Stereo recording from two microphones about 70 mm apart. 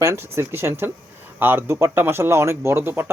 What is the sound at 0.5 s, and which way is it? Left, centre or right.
A man's voice, right.